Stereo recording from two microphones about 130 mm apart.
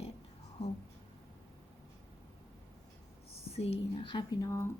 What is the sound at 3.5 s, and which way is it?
Speech, 50° left (ahead or behind).